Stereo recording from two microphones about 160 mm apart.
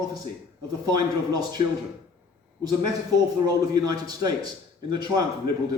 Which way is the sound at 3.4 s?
25° right (ahead or behind).